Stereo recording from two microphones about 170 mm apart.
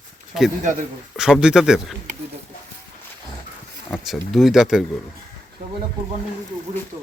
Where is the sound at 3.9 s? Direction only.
Centre (ahead or behind).